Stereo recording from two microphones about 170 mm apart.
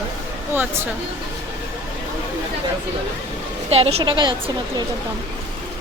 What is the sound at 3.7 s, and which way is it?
Speech, 35° right (ahead or behind).